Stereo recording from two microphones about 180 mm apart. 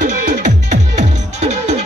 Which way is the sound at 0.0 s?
45° right (ahead or behind).